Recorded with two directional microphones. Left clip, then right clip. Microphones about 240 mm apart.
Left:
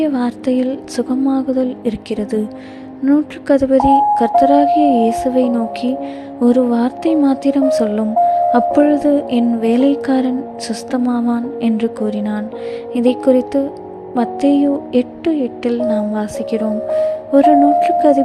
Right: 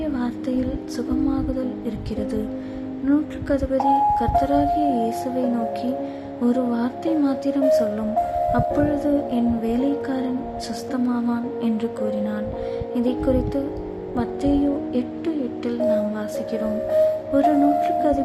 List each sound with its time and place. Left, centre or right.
0.0 s music: left